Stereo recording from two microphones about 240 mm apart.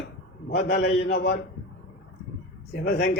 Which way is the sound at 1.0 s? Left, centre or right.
Left.